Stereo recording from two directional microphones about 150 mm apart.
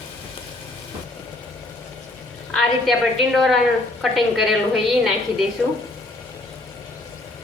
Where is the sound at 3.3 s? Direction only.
Centre (ahead or behind).